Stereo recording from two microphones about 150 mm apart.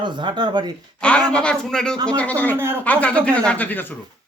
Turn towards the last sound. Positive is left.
turn(degrees=10)  # may be behind; listen again after turning